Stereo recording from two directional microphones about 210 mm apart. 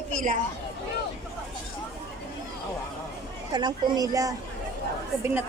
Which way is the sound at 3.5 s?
20° right (ahead or behind).